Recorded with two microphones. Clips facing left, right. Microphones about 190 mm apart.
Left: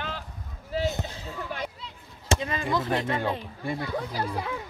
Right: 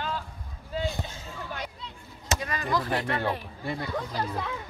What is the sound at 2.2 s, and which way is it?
Speech, 25° left (ahead or behind).